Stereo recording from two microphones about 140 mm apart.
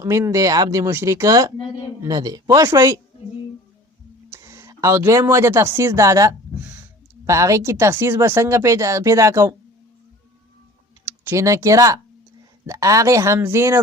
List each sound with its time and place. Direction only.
0.0 s speech: 20° right (ahead or behind)
4.3 s speech: 20° right (ahead or behind)
6.6 s a sound: 10° right (ahead or behind)
7.3 s speech: 20° right (ahead or behind)
11.3 s speech: 20° right (ahead or behind)